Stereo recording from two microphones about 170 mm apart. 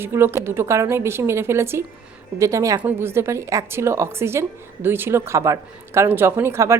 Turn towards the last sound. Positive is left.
turn(degrees=-15)  # may be behind; listen again after turning